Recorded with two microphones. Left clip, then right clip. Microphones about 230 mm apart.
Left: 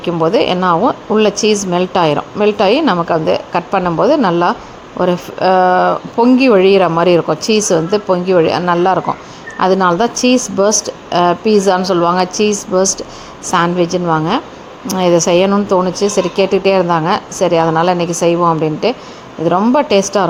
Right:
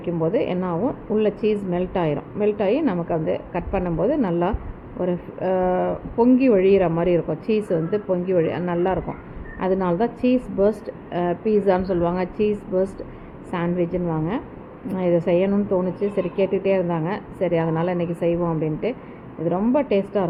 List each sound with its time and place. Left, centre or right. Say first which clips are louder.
0.0 s speech: left 10 dB; left